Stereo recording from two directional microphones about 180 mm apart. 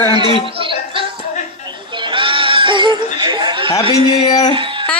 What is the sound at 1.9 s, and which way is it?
Bleat, 25° right (ahead or behind).